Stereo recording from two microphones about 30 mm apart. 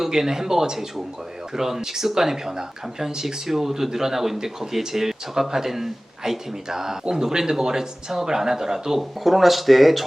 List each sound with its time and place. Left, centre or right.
0.0 s speech: centre